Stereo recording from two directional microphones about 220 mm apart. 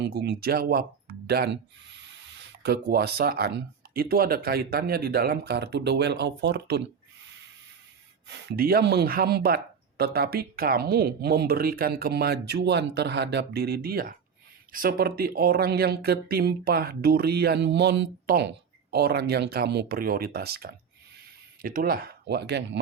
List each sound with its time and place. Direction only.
0.0 s speech: 45° right (ahead or behind)
8.3 s speech: 50° right (ahead or behind)